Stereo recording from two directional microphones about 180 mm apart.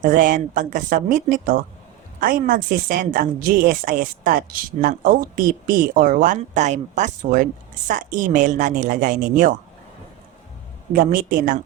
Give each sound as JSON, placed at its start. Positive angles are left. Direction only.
{"t": 0.0, "sound": "a woman's voice", "side_deg": -50}
{"t": 10.9, "sound": "a woman's voice", "side_deg": -50}